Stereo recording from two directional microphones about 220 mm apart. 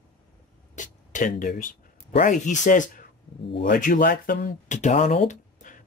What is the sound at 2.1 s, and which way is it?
Speech, 35° left (ahead or behind).